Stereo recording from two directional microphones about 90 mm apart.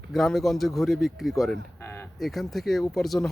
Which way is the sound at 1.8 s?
25° left (ahead or behind).